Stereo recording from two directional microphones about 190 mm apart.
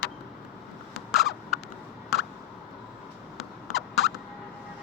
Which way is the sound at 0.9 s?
Centre (ahead or behind).